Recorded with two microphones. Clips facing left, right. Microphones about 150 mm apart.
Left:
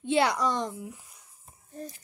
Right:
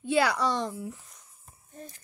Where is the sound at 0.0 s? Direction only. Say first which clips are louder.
Even; 25° left (ahead or behind).